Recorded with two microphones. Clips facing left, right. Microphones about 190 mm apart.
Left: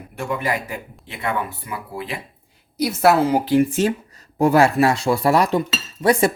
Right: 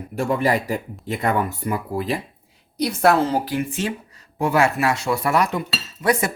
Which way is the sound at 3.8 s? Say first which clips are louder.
Left 6 dB; 40° left (ahead or behind).